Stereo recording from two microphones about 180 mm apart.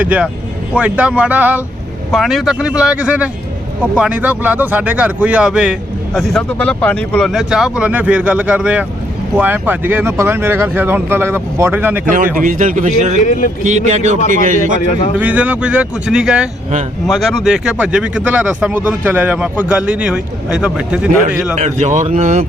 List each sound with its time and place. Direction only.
0.0 s speech: 10° right (ahead or behind)
12.4 s a man's voice: 45° right (ahead or behind)
13.2 s a man's voice: 45° left (ahead or behind)
13.7 s a man's voice: 40° right (ahead or behind)
15.2 s speech: 10° right (ahead or behind)
21.5 s speech: 40° right (ahead or behind)